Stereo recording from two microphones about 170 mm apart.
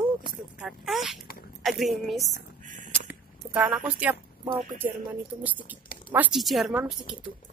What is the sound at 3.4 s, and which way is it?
A woman's voice, 10° right (ahead or behind).